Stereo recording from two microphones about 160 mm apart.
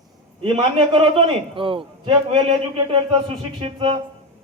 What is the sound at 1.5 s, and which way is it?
A man's voice, 35° right (ahead or behind).